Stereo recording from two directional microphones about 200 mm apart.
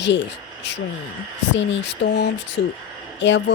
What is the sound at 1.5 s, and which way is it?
Speech, 60° left (ahead or behind).